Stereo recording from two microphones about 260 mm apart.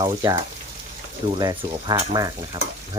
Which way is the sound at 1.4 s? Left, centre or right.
Centre.